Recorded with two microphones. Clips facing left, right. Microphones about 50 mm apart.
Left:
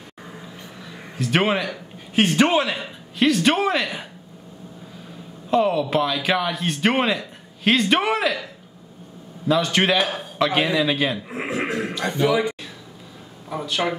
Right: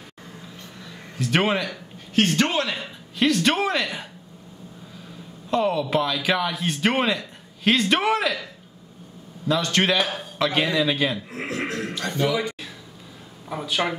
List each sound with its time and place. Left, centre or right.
0.8 s speech: centre
5.5 s speech: centre
9.5 s speech: centre
11.2 s television: centre
12.0 s speech: centre
13.5 s speech: centre